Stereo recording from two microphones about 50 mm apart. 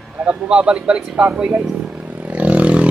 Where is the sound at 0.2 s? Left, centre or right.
Right.